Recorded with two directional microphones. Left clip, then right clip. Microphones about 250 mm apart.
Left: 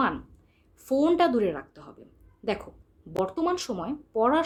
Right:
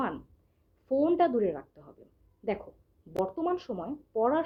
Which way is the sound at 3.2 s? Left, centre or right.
Centre.